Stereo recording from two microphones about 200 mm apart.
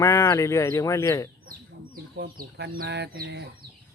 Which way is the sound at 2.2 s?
55° right (ahead or behind).